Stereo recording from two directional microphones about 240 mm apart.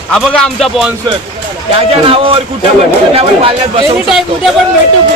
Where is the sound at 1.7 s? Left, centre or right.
Right.